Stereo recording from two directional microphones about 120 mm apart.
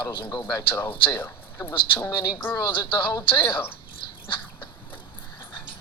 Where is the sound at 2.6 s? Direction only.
35° left (ahead or behind).